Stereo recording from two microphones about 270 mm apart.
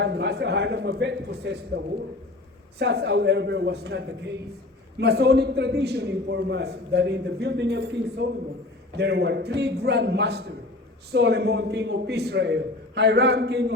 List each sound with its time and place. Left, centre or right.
0.0 s a man's voice: right